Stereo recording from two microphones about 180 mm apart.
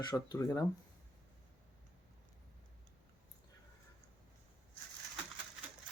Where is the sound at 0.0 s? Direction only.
25° left (ahead or behind).